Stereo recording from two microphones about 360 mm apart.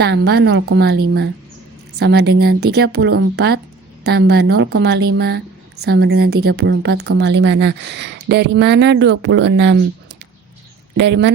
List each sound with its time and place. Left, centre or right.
0.0 s a woman's voice: right
10.9 s a woman's voice: right